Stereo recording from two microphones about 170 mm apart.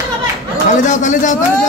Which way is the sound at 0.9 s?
45° left (ahead or behind).